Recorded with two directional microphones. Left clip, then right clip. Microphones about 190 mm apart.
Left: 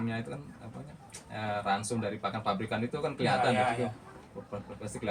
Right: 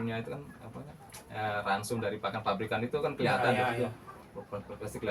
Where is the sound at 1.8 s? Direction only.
20° right (ahead or behind).